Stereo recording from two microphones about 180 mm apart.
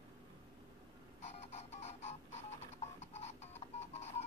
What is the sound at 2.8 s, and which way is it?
Music, 35° left (ahead or behind).